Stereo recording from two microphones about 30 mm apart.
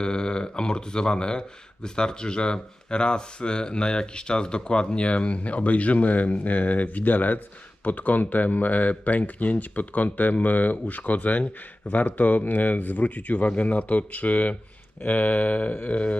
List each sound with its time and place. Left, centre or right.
0.0 s speech: left
15.0 s speech: left